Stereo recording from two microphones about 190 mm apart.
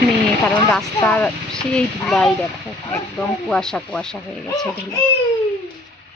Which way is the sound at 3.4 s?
5° left (ahead or behind).